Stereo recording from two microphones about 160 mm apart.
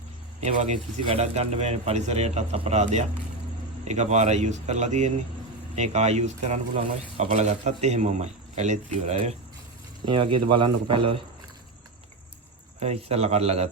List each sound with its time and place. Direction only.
0.4 s speech: 45° right (ahead or behind)
10.1 s a man's voice: 30° right (ahead or behind)
12.8 s a man's voice: 40° right (ahead or behind)